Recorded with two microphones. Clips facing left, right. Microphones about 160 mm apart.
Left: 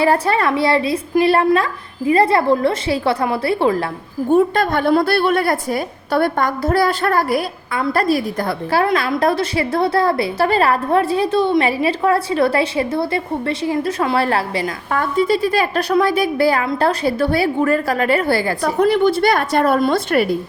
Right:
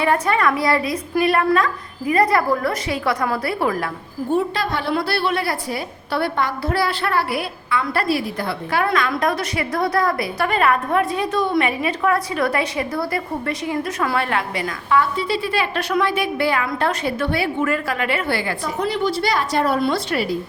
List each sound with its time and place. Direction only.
0.0 s a woman's voice: 30° left (ahead or behind)
4.3 s a woman's voice: 50° left (ahead or behind)
8.8 s a woman's voice: 30° left (ahead or behind)
14.8 s a woman's voice: 45° left (ahead or behind)
18.6 s a woman's voice: 55° left (ahead or behind)